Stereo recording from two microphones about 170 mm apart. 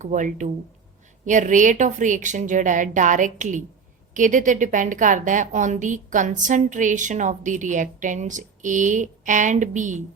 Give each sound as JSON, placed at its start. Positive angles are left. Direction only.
{"t": 0.0, "sound": "a woman's voice", "side_deg": -50}